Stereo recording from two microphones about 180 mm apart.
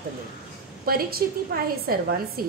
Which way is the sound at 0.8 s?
55° right (ahead or behind).